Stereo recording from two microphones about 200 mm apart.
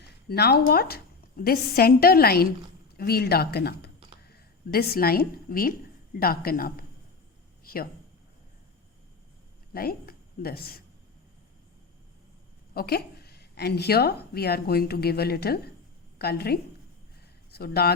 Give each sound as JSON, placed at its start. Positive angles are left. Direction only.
{"t": 0.3, "sound": "a woman's voice", "side_deg": 55}
{"t": 7.6, "sound": "a sound", "side_deg": 45}
{"t": 9.7, "sound": "a woman's voice", "side_deg": 45}
{"t": 12.7, "sound": "a woman's voice", "side_deg": 50}